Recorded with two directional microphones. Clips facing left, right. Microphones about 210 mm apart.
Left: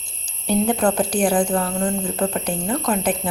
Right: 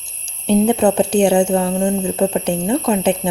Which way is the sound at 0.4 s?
25° right (ahead or behind).